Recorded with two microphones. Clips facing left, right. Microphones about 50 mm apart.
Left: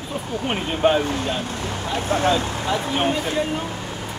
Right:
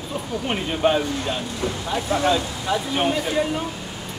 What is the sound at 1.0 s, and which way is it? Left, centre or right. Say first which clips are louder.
Speech: left 1 dB; left.